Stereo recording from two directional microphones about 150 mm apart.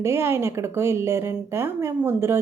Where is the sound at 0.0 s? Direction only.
15° right (ahead or behind).